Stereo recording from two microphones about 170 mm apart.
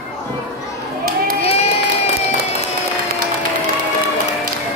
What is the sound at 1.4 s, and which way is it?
Crowd, 35° left (ahead or behind).